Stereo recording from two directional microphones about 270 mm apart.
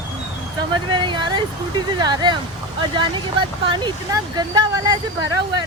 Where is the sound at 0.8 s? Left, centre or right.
Centre.